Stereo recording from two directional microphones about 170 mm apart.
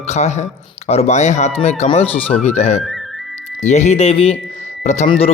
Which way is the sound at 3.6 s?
40° left (ahead or behind).